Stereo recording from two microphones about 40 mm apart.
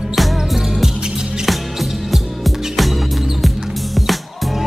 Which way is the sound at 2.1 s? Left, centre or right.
Centre.